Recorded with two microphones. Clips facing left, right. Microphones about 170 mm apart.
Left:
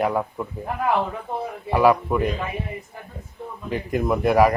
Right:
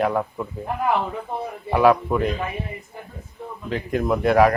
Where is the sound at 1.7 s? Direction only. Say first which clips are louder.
Right 1 dB; 5° left (ahead or behind).